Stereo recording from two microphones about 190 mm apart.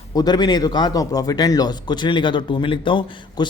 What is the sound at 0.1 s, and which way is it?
Speech, 20° left (ahead or behind).